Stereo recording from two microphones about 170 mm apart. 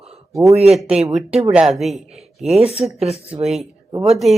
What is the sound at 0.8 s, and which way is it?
Speech, centre (ahead or behind).